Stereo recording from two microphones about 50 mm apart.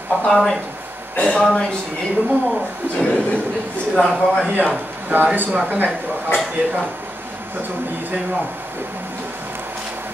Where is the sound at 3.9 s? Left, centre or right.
Centre.